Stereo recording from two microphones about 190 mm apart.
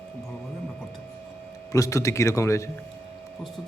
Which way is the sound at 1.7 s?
15° left (ahead or behind).